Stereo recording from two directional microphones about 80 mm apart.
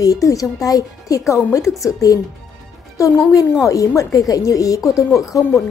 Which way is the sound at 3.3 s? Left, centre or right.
Left.